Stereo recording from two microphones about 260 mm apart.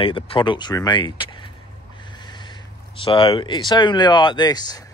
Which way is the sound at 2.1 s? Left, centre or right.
Centre.